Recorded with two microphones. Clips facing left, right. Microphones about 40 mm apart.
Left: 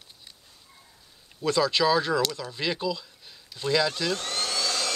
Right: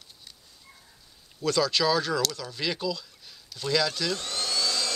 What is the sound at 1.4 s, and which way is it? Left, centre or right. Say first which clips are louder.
Speech: left 2 dB; centre.